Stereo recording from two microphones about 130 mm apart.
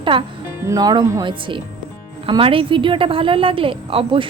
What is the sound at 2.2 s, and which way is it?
A woman's voice, 40° right (ahead or behind).